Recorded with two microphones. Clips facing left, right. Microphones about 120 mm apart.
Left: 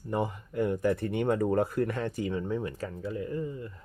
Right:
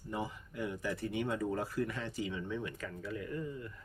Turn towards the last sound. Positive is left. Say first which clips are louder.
# left 6 dB
turn(degrees=25)  # may be behind; listen again after turning